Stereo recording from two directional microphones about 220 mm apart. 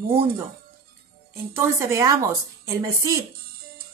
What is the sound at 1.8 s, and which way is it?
A woman's voice, 15° right (ahead or behind).